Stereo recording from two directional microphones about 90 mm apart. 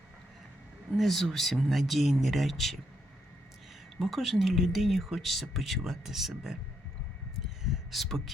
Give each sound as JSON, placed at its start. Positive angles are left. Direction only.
{"t": 0.9, "sound": "speech", "side_deg": 0}
{"t": 4.0, "sound": "speech", "side_deg": 0}
{"t": 7.6, "sound": "a sound", "side_deg": 0}